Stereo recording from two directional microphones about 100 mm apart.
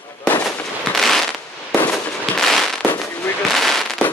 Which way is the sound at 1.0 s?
Centre (ahead or behind).